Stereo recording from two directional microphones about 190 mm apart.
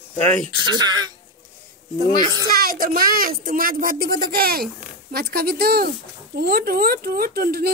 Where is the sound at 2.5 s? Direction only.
50° right (ahead or behind).